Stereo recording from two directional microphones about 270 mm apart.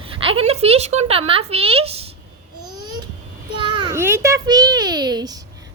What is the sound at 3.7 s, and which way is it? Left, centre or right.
A child's voice, centre.